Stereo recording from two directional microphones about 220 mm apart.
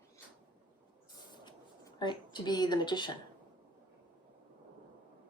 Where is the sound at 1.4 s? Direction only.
20° left (ahead or behind).